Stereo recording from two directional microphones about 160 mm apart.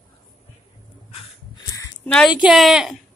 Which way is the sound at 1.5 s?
20° left (ahead or behind).